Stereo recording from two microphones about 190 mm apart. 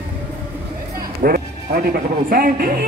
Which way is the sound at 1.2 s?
50° right (ahead or behind).